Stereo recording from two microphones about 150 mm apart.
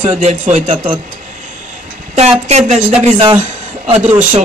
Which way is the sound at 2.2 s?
45° right (ahead or behind).